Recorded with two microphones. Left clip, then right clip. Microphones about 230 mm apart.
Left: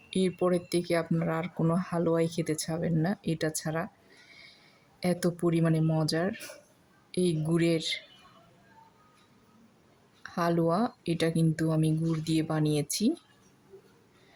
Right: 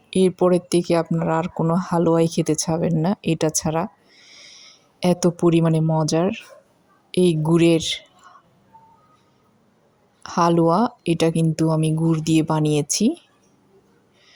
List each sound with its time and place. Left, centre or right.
0.1 s speech: right
4.3 s a sound: right
6.0 s speech: right
10.2 s speech: right